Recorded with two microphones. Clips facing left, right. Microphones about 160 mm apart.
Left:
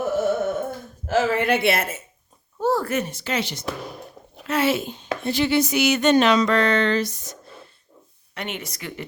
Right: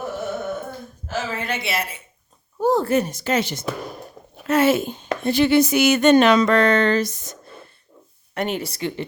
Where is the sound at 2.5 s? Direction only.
15° right (ahead or behind).